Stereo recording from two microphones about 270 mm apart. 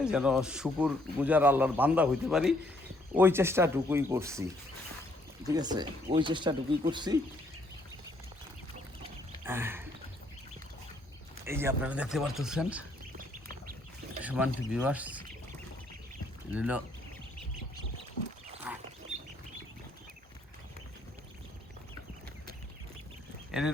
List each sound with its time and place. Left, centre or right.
0.0 s speech: centre
5.5 s speech: centre
9.4 s a sound: centre
11.4 s speech: centre
14.2 s speech: centre
16.5 s speech: centre
18.7 s wild animals: centre
23.5 s speech: centre